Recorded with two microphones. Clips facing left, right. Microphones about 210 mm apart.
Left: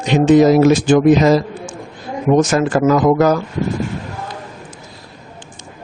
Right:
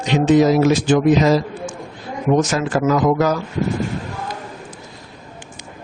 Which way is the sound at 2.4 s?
50° left (ahead or behind).